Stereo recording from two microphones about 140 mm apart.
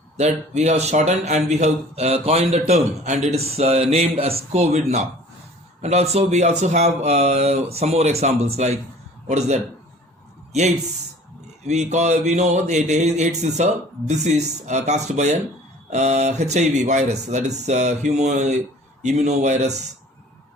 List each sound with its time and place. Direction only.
0.2 s speech: 55° right (ahead or behind)